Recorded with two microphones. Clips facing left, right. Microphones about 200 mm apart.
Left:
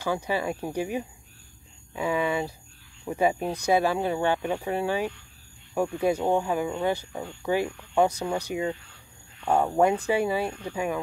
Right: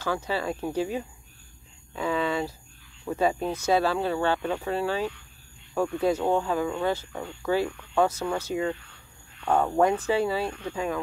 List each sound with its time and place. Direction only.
0.0 s speech: 15° left (ahead or behind)